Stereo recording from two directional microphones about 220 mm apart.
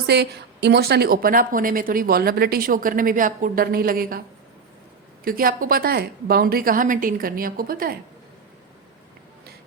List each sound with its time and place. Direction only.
0.1 s a woman's voice: 50° right (ahead or behind)
5.2 s a woman's voice: 40° right (ahead or behind)